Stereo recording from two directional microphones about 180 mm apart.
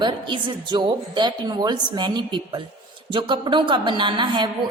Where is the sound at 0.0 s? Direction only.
25° right (ahead or behind).